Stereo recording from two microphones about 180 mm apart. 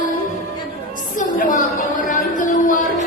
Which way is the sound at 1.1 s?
45° left (ahead or behind).